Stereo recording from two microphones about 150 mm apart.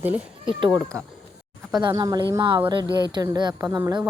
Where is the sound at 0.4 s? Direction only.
30° right (ahead or behind).